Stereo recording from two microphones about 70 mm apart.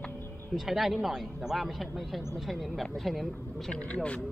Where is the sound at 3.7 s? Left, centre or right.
Centre.